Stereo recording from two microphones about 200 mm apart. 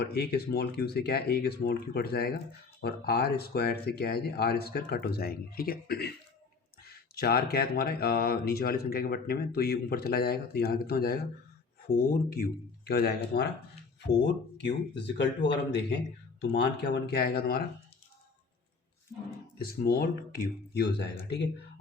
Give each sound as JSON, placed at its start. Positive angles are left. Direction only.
{"t": 0.0, "sound": "speech", "side_deg": 55}
{"t": 14.6, "sound": "speech", "side_deg": 60}
{"t": 19.5, "sound": "speech", "side_deg": 50}